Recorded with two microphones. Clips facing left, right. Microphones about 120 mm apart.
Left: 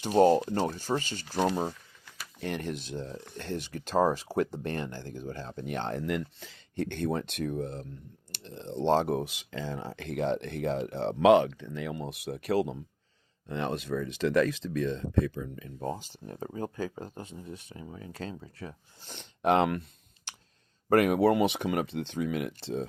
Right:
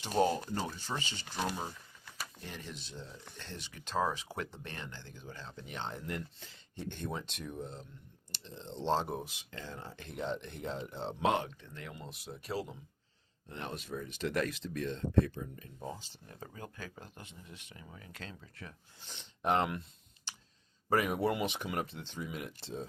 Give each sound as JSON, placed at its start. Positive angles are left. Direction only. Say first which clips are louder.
{"t": 0.0, "sound": "speech", "louder": "left 9 dB", "side_deg": 45}
{"t": 2.4, "sound": "speech", "louder": "left 12 dB", "side_deg": 65}
{"t": 13.5, "sound": "speech", "louder": "left 10 dB", "side_deg": 90}
{"t": 15.6, "sound": "speech", "louder": "left 8 dB", "side_deg": 65}
{"t": 16.2, "sound": "speech", "louder": "left 13 dB", "side_deg": 40}
{"t": 19.0, "sound": "speech", "louder": "left 6 dB", "side_deg": 50}
{"t": 19.4, "sound": "speech", "louder": "left 6 dB", "side_deg": 85}
{"t": 20.9, "sound": "speech", "louder": "left 8 dB", "side_deg": 70}